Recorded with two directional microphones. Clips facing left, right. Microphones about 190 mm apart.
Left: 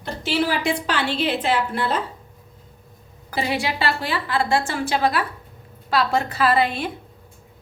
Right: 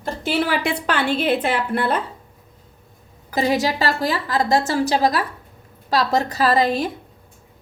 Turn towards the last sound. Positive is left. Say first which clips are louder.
# right 2 dB
turn(degrees=-40)  # may be behind; listen again after turning